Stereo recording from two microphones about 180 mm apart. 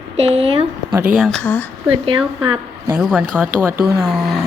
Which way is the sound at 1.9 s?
30° right (ahead or behind).